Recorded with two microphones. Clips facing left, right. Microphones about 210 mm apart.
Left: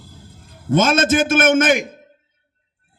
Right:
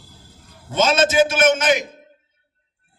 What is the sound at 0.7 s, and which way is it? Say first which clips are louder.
A man's voice: left 3 dB; 50° left (ahead or behind).